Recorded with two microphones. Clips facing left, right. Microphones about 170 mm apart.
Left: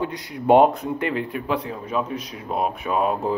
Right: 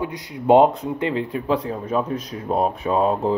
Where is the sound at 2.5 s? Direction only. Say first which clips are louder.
Right 3 dB; 35° right (ahead or behind).